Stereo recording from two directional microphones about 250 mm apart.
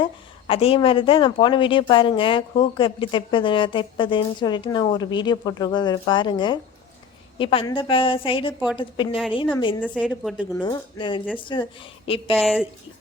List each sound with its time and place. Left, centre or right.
0.0 s speech: left
9.9 s a woman's voice: centre
10.5 s speech: centre
12.4 s a woman's voice: centre